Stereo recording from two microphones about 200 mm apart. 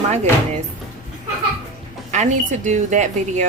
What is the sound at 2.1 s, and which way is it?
Speech, 35° right (ahead or behind).